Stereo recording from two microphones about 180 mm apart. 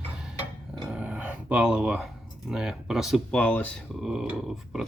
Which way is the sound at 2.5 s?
5° right (ahead or behind).